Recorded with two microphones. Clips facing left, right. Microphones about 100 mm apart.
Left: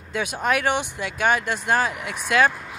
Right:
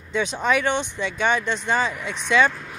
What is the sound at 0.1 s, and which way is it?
Speech, 10° left (ahead or behind).